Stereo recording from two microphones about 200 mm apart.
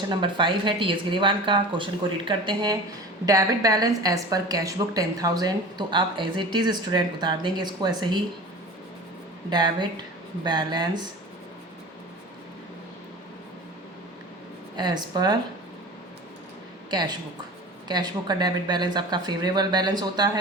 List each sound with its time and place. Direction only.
0.1 s a woman's voice: 25° right (ahead or behind)
9.5 s a woman's voice: 20° right (ahead or behind)
14.8 s a woman's voice: 20° right (ahead or behind)
17.8 s a woman's voice: 20° right (ahead or behind)